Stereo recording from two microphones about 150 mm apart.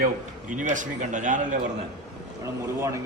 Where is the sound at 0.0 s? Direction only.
60° right (ahead or behind).